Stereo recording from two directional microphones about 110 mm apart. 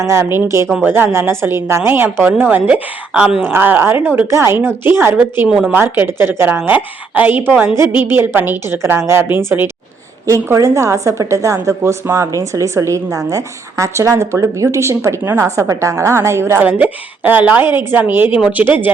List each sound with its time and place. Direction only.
0.0 s a woman's voice: 25° right (ahead or behind)
5.5 s speech: 5° right (ahead or behind)
5.7 s a woman's voice: 20° right (ahead or behind)